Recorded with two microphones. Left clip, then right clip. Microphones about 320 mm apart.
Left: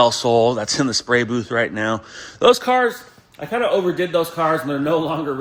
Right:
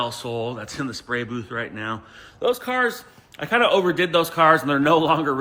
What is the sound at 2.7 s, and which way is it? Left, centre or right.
A man's voice, centre.